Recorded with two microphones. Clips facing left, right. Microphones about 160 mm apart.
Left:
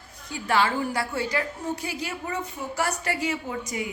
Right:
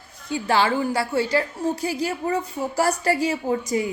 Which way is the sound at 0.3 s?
30° right (ahead or behind).